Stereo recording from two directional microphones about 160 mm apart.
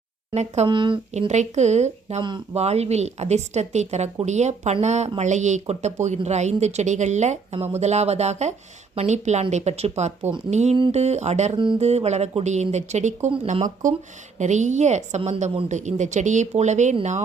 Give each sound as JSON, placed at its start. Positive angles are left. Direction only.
{"t": 0.3, "sound": "speech", "side_deg": -45}
{"t": 0.7, "sound": "speech", "side_deg": -30}
{"t": 1.3, "sound": "speech", "side_deg": -45}
{"t": 11.5, "sound": "speech", "side_deg": -30}